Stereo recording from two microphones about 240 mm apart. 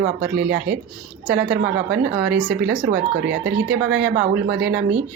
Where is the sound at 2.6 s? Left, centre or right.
Right.